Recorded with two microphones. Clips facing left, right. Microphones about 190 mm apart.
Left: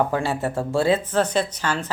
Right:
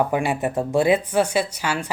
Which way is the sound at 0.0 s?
15° right (ahead or behind).